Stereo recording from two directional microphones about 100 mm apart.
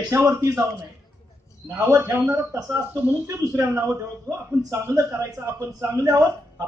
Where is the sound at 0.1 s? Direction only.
30° right (ahead or behind).